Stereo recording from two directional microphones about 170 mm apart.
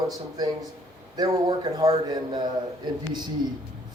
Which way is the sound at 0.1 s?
20° right (ahead or behind).